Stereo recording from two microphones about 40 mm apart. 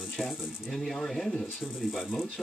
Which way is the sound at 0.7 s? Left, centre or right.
Centre.